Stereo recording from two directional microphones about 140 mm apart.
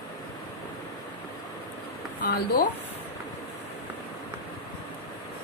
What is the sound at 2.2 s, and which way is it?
Speech, 90° left.